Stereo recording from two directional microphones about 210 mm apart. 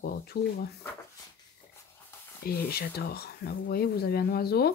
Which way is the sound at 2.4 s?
45° left (ahead or behind).